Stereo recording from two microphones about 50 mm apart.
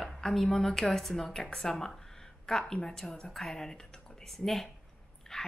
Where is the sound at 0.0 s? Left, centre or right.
Centre.